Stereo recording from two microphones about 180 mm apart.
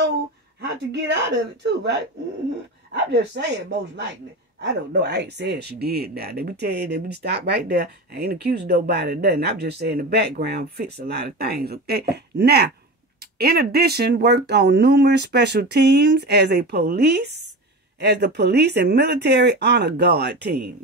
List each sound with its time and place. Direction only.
0.6 s a woman's voice: 75° right (ahead or behind)
4.6 s speech: 75° right (ahead or behind)